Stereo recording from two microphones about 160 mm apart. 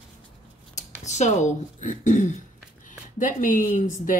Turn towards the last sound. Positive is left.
turn(degrees=55)  # may be behind; listen again after turning